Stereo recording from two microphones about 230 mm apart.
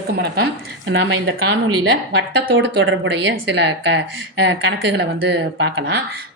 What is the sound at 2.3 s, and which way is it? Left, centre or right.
A woman's voice, right.